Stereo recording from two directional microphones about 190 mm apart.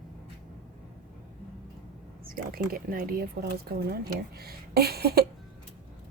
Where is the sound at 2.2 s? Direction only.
50° right (ahead or behind).